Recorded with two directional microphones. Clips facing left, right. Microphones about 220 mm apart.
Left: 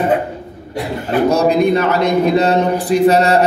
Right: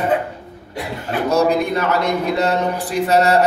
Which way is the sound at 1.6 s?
15° left (ahead or behind).